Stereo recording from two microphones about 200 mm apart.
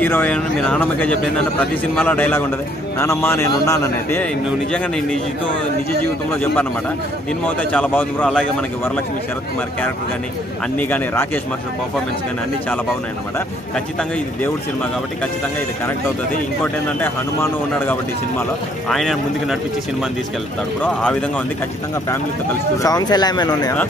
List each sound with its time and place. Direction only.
0.0 s speech: 10° left (ahead or behind)
6.4 s speech: 10° left (ahead or behind)
10.8 s speech: 10° left (ahead or behind)
13.7 s speech: 5° left (ahead or behind)
16.6 s speech: 10° left (ahead or behind)
22.8 s speech: 20° left (ahead or behind)